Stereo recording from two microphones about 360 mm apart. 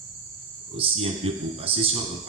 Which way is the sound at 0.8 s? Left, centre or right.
Centre.